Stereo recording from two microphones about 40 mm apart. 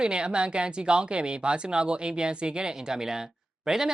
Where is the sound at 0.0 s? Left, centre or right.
Right.